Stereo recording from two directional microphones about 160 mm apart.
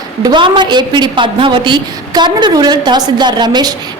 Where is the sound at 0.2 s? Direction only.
25° right (ahead or behind).